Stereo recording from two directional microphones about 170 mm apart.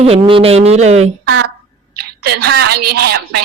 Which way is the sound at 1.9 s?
70° right (ahead or behind).